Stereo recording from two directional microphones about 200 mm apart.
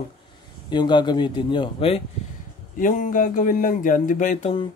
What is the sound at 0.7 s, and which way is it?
Speech, 20° left (ahead or behind).